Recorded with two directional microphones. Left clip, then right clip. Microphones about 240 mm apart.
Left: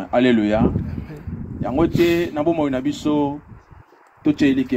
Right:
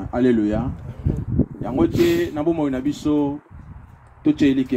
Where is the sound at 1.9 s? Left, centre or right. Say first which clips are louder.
Even; right.